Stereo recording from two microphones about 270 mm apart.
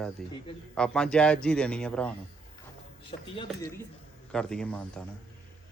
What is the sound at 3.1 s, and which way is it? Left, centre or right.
Speech, left.